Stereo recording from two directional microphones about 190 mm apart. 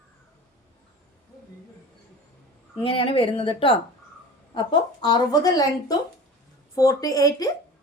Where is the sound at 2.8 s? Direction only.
30° left (ahead or behind).